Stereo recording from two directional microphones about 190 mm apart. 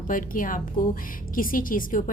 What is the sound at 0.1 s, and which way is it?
A woman's voice, 45° left (ahead or behind).